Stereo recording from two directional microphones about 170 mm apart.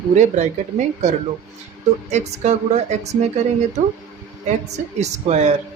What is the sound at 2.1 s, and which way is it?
Speech, 40° right (ahead or behind).